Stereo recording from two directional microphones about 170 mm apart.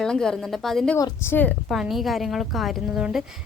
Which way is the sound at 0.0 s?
5° left (ahead or behind).